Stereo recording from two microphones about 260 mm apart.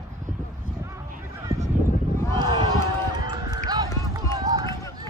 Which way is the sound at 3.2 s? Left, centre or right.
Centre.